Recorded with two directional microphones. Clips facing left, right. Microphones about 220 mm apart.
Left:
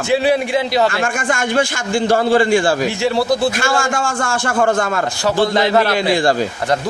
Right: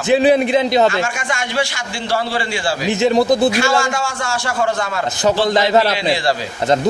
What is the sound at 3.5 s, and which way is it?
Speech, 50° left (ahead or behind).